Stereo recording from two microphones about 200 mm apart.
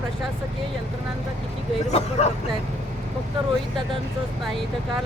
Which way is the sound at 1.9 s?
35° left (ahead or behind).